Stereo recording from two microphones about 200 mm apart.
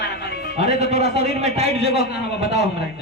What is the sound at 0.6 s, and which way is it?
A man's voice, 35° right (ahead or behind).